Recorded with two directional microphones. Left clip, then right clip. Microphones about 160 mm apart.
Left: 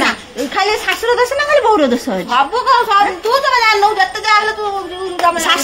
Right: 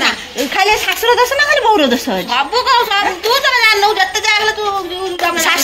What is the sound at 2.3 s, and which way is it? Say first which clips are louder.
Speech: left 1 dB; 35° left (ahead or behind).